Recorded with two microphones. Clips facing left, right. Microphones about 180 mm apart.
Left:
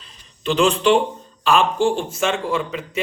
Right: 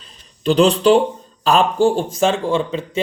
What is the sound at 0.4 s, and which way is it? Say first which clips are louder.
A man's voice: right 4 dB; 35° right (ahead or behind).